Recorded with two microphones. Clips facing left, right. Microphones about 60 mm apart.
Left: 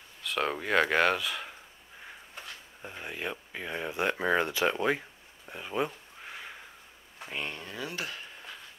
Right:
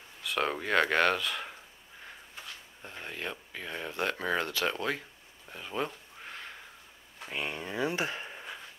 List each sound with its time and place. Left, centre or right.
0.2 s speech: centre
2.8 s speech: centre
5.5 s a sound: centre
7.4 s speech: centre